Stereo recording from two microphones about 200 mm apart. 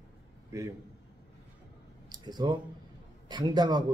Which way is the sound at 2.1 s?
20° right (ahead or behind).